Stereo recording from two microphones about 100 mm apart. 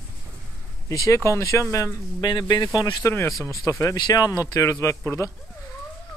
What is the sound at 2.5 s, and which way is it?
Speech, 45° left (ahead or behind).